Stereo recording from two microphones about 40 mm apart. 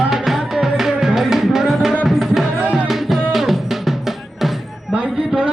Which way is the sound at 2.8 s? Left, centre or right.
Centre.